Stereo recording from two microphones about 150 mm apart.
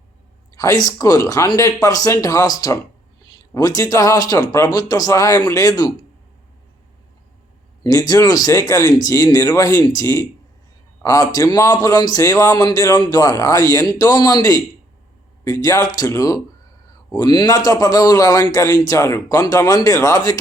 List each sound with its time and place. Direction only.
0.5 s a man's voice: 20° left (ahead or behind)
7.9 s a man's voice: 25° left (ahead or behind)